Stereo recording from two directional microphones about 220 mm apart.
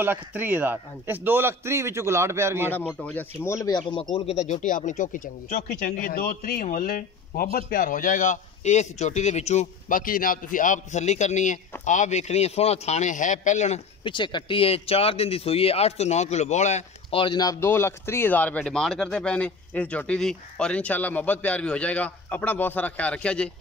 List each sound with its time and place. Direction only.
0.0 s a man's voice: 10° right (ahead or behind)
2.7 s speech: 5° left (ahead or behind)